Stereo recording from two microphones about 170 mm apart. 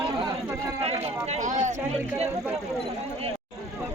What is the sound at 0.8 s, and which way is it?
Speech, 35° right (ahead or behind).